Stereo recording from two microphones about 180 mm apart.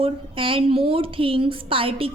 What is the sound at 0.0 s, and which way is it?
A woman's voice, 30° right (ahead or behind).